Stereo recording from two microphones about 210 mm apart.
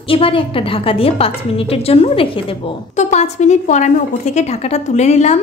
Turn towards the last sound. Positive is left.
turn(degrees=30)  # may be behind; listen again after turning